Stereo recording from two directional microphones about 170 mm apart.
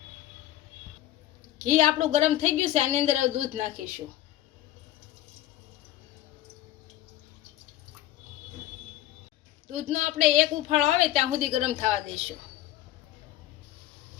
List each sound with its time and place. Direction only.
1.6 s a woman's voice: 40° right (ahead or behind)
9.7 s a woman's voice: 50° right (ahead or behind)